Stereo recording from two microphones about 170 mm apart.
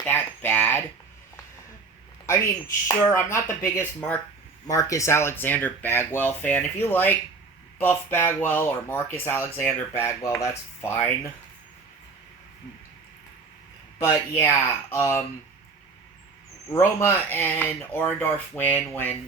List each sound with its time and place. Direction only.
0.0 s a sound: 10° left (ahead or behind)
2.2 s speech: 15° left (ahead or behind)
14.0 s speech: 15° left (ahead or behind)
16.7 s speech: 15° left (ahead or behind)